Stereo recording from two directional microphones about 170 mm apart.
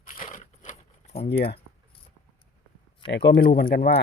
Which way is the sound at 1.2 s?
70° left (ahead or behind).